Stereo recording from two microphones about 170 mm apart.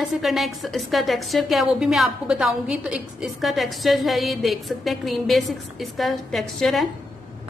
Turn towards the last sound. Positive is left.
turn(degrees=0)  # may be behind; listen again after turning